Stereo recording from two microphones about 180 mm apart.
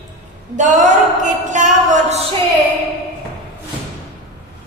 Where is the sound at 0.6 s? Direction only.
45° right (ahead or behind).